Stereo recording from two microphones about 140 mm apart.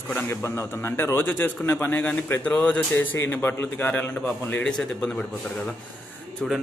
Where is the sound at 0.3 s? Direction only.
20° left (ahead or behind).